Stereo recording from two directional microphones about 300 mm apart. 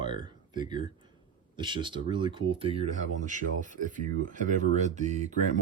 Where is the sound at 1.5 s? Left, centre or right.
Centre.